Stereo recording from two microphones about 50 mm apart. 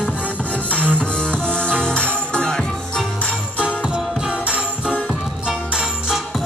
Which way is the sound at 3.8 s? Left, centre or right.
Centre.